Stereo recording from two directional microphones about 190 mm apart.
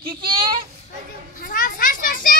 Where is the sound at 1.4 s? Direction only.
45° left (ahead or behind).